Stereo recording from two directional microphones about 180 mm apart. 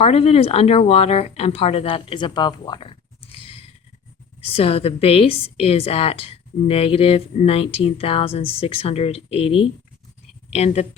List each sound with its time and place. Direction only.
0.0 s a woman's voice: 35° left (ahead or behind)